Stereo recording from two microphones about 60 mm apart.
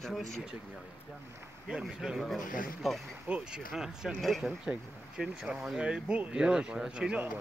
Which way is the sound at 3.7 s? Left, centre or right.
Centre.